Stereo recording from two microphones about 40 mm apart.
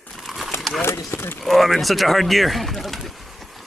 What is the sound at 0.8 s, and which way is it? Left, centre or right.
Speech, left.